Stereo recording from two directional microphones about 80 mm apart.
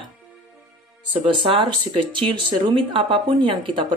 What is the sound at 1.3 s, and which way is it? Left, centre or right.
Speech, right.